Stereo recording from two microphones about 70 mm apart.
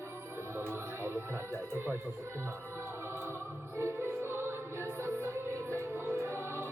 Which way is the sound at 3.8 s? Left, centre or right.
Right.